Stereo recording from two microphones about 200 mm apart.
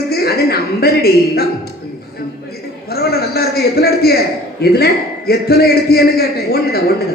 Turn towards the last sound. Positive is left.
turn(degrees=50)  # may be behind; listen again after turning